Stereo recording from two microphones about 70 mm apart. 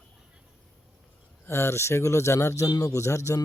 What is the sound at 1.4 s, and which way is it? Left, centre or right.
A man's voice, left.